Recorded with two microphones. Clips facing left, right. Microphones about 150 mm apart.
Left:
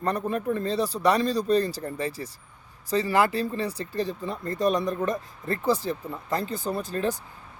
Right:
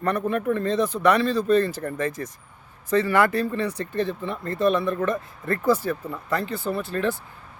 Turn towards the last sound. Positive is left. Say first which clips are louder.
# right 2 dB
turn(degrees=40)  # may be behind; listen again after turning